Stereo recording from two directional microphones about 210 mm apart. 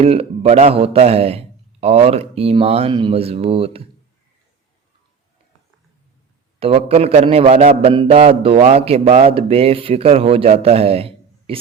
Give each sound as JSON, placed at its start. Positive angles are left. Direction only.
{"t": 0.0, "sound": "a man's voice", "side_deg": -30}
{"t": 6.6, "sound": "a man's voice", "side_deg": -25}